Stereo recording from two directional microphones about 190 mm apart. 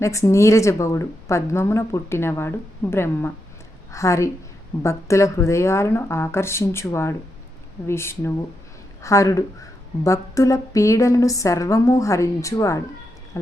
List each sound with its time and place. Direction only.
0.0 s a woman's voice: 15° left (ahead or behind)